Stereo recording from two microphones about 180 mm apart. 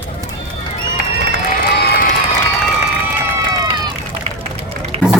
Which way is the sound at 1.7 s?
65° left (ahead or behind).